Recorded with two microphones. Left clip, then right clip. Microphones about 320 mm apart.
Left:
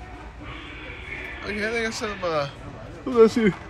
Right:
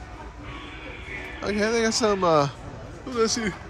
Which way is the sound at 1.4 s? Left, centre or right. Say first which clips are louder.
Right 3 dB; centre.